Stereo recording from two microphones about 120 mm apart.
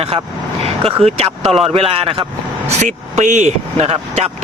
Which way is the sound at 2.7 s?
75° right (ahead or behind).